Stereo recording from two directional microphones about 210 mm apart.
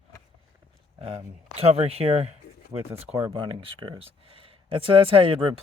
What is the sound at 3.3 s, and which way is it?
Speech, 20° right (ahead or behind).